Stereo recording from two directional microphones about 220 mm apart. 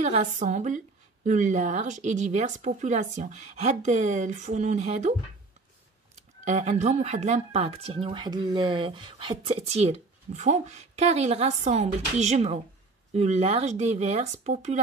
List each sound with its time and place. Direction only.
0.0 s a woman's voice: 30° right (ahead or behind)
6.4 s a woman's voice: 30° right (ahead or behind)